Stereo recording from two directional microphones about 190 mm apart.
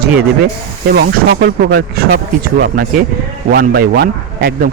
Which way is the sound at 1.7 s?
55° right (ahead or behind).